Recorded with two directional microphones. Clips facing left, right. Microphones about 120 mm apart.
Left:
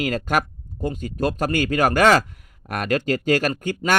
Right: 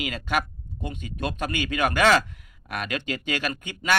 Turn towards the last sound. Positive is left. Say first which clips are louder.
# left 4 dB
turn(degrees=45)  # may be behind; listen again after turning